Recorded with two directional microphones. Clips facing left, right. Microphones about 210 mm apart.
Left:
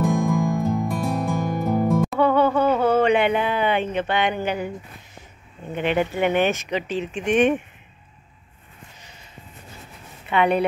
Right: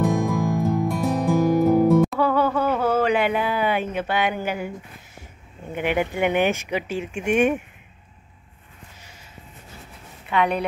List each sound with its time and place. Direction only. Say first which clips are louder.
0.0 s music: left 1 dB; centre (ahead or behind)
5.7 s speech: left 1 dB; 10° right (ahead or behind)
10.3 s a woman's voice: left 2 dB; 5° left (ahead or behind)